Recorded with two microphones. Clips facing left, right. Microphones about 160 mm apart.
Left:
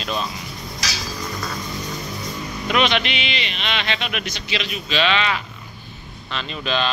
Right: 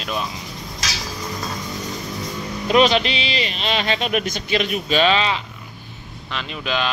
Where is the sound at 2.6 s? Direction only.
35° right (ahead or behind).